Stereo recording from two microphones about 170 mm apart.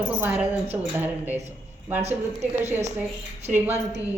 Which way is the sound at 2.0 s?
40° right (ahead or behind).